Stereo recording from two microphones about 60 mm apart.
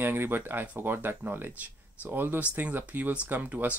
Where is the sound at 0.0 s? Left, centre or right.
Right.